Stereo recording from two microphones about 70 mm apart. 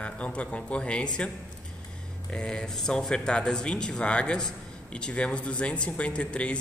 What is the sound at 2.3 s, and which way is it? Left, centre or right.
Speech, centre.